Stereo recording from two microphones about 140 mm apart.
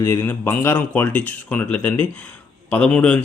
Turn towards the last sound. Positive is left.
turn(degrees=10)  # may be behind; listen again after turning